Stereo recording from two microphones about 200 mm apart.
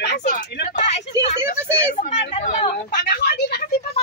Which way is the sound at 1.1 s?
15° right (ahead or behind).